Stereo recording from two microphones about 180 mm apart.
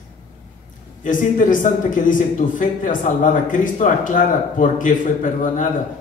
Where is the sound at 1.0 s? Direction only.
45° left (ahead or behind).